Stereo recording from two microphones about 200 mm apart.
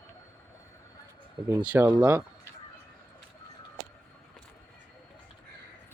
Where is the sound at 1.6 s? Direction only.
5° right (ahead or behind).